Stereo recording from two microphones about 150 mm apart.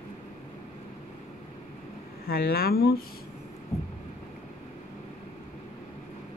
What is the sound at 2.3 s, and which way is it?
Speech, 85° left.